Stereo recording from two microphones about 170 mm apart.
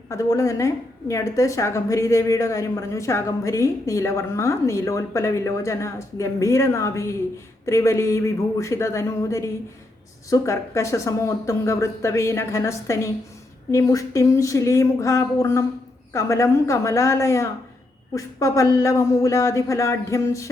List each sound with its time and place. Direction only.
0.1 s a woman's voice: 20° left (ahead or behind)